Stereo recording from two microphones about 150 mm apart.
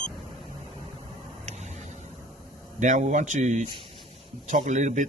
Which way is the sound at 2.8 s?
55° right (ahead or behind).